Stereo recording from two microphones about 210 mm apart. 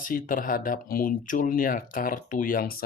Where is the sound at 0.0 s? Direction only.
40° left (ahead or behind).